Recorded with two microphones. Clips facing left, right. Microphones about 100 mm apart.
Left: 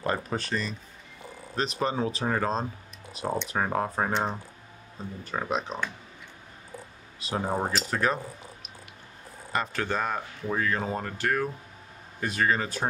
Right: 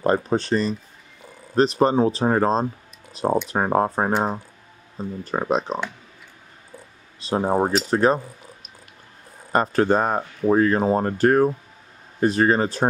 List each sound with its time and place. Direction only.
0.0 s speech: 30° right (ahead or behind)
7.2 s speech: 35° right (ahead or behind)
9.5 s speech: 40° right (ahead or behind)